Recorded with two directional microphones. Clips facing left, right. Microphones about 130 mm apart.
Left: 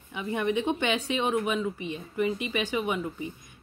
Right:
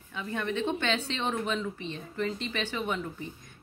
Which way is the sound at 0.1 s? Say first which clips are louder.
Left 5 dB; 15° left (ahead or behind).